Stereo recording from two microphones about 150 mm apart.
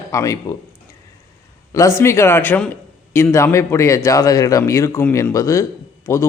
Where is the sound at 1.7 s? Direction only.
20° left (ahead or behind).